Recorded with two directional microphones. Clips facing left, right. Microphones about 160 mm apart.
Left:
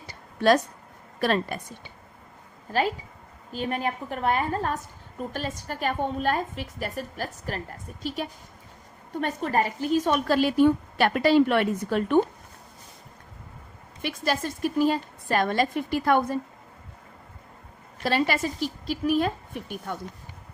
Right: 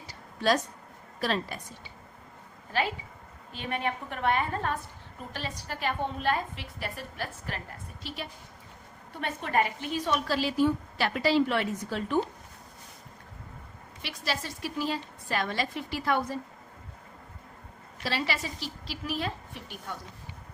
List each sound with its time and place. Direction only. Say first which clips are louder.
0.1 s a sound: left 6 dB; 60° left (ahead or behind)
1.2 s a woman's voice: left 5 dB; 55° left (ahead or behind)
3.5 s a woman's voice: left 4 dB; 40° left (ahead or behind); by 12.2 s 60° left (ahead or behind)
14.0 s a woman's voice: left 7 dB; 50° left (ahead or behind)
18.0 s a woman's voice: left 7 dB; 50° left (ahead or behind)